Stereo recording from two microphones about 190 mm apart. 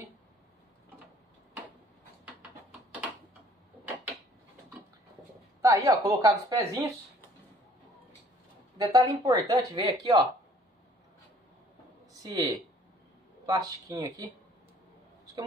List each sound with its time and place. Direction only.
5.6 s a woman's voice: 15° right (ahead or behind)
8.7 s speech: 20° right (ahead or behind)
12.1 s speech: 20° right (ahead or behind)